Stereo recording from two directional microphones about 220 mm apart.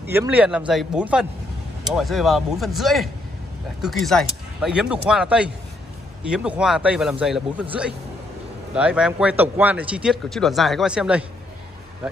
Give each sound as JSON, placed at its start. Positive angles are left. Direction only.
{"t": 0.0, "sound": "speech", "side_deg": -10}
{"t": 8.7, "sound": "speech", "side_deg": -5}